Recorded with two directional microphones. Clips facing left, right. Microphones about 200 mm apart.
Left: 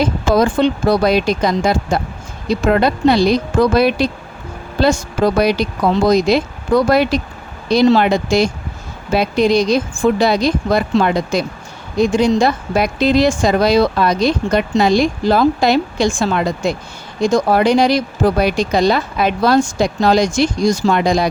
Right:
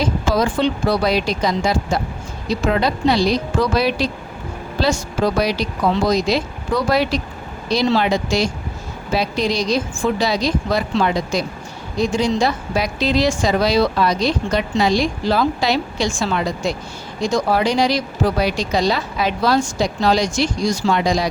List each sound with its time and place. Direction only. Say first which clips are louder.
0.0 s a woman's voice: left 4 dB; 50° left (ahead or behind)